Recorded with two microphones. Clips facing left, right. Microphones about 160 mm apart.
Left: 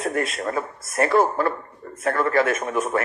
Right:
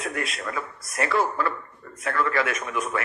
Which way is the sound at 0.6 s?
25° left (ahead or behind).